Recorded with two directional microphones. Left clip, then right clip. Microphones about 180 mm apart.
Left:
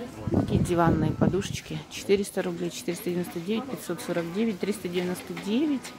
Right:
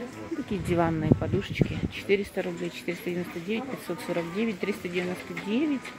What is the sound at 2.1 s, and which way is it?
A woman's voice, 20° left (ahead or behind).